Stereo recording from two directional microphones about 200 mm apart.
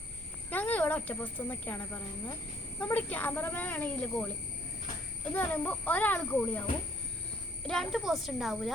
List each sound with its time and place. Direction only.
0.5 s speech: 10° left (ahead or behind)
5.3 s speech: 10° left (ahead or behind)
7.7 s speech: centre (ahead or behind)